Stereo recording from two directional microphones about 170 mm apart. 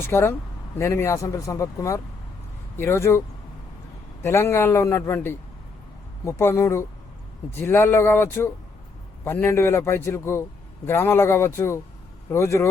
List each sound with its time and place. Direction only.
0.0 s a man's voice: 15° left (ahead or behind)